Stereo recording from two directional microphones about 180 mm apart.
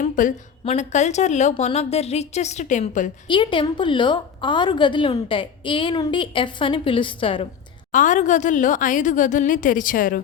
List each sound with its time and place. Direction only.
0.0 s a sound: 45° left (ahead or behind)
0.6 s a woman's voice: 40° left (ahead or behind)
3.2 s a woman's voice: 25° left (ahead or behind)
7.9 s a woman's voice: 45° left (ahead or behind)